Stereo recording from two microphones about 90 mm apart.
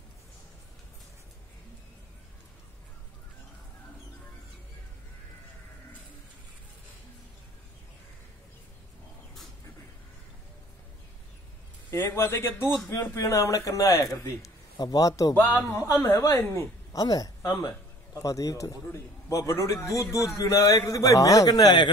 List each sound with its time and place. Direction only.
11.9 s a man's voice: 30° left (ahead or behind)
14.8 s a man's voice: 45° left (ahead or behind)
15.3 s speech: 20° left (ahead or behind)
15.8 s a man's voice: 30° left (ahead or behind)
16.9 s a woman's voice: 45° left (ahead or behind)